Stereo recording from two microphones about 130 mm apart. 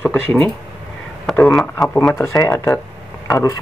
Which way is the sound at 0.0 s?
10° left (ahead or behind).